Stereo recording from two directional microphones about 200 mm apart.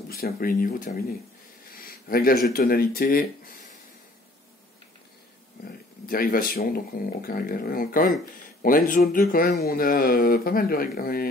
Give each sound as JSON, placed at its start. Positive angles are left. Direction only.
{"t": 0.1, "sound": "speech", "side_deg": 45}
{"t": 5.7, "sound": "speech", "side_deg": 45}